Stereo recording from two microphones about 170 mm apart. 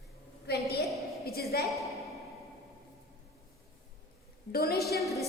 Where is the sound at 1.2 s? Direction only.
65° left (ahead or behind).